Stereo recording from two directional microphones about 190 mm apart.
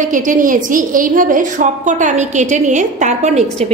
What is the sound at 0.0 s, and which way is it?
A woman's voice, 45° right (ahead or behind).